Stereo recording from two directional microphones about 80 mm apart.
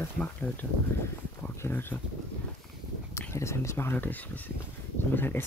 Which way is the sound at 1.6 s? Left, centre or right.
Left.